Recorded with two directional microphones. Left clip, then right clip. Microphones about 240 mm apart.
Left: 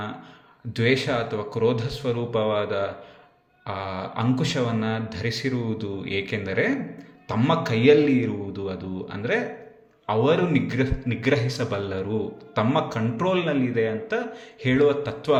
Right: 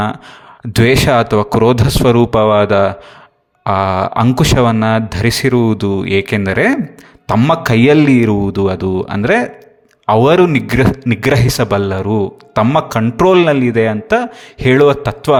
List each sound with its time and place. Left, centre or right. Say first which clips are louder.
0.7 s a man's voice: right 12 dB; right